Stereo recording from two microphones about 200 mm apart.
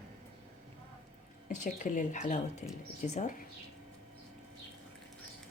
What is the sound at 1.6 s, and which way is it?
Speech, 40° left (ahead or behind).